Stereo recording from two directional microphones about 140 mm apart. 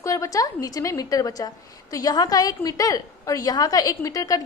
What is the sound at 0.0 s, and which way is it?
A woman's voice, 25° left (ahead or behind).